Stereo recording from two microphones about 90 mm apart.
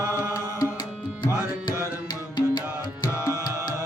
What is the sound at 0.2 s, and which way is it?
Music, 40° left (ahead or behind).